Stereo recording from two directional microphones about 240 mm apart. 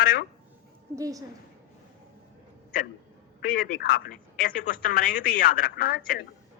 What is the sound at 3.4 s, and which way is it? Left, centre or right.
Speech, left.